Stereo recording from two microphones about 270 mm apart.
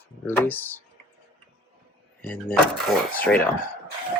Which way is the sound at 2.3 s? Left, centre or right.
Centre.